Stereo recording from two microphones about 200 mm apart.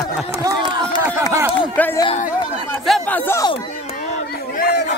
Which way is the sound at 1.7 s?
10° left (ahead or behind).